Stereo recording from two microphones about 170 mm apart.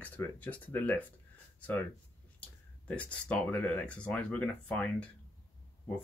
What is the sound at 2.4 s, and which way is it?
Speech, 10° left (ahead or behind).